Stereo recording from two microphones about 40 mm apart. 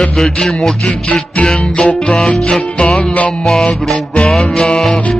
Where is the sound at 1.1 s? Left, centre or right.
Left.